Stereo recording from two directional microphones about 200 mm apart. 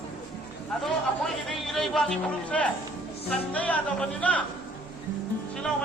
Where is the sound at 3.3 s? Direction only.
5° left (ahead or behind).